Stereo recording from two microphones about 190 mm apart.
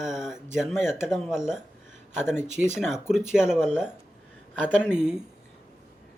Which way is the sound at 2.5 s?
40° right (ahead or behind).